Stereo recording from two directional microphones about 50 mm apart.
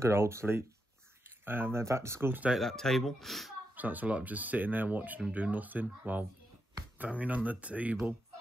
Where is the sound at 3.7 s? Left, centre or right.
Right.